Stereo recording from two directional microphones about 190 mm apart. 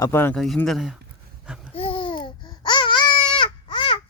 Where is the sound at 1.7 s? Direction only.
30° left (ahead or behind).